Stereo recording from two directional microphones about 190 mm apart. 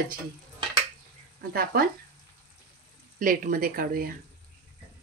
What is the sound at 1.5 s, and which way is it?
Speech, 55° right (ahead or behind).